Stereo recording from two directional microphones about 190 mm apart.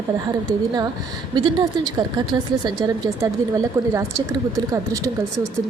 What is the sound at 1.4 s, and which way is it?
A woman's voice, 20° right (ahead or behind).